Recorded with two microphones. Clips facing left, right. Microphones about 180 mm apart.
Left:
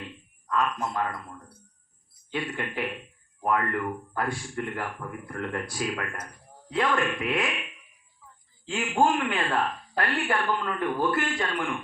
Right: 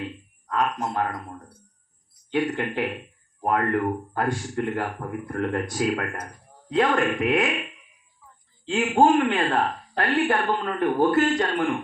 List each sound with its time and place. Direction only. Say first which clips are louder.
0.6 s speech: right 4 dB; 50° right (ahead or behind)
8.7 s speech: right 6 dB; 45° right (ahead or behind)